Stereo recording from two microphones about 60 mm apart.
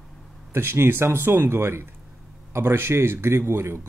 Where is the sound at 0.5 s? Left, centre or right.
Right.